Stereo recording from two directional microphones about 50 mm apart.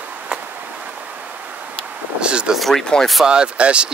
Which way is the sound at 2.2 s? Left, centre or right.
Centre.